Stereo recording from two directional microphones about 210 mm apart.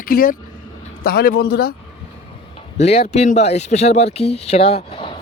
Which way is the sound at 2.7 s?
30° left (ahead or behind).